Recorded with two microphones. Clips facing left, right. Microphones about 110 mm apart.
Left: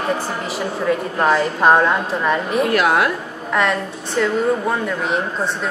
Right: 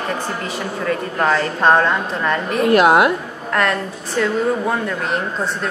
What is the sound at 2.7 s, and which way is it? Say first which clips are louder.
Speech: right 7 dB; 25° right (ahead or behind).